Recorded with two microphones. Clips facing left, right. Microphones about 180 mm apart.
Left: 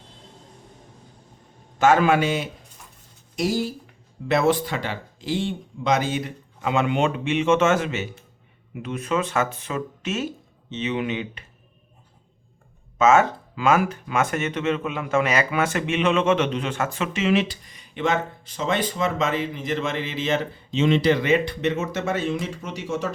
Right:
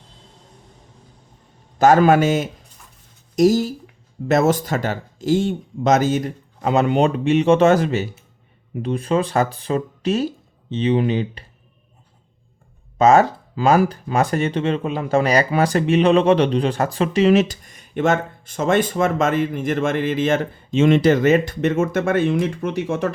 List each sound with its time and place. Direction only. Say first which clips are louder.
1.8 s speech: right 5 dB; 40° right (ahead or behind)
13.0 s speech: right 4 dB; 35° right (ahead or behind); by 23.1 s 55° right (ahead or behind)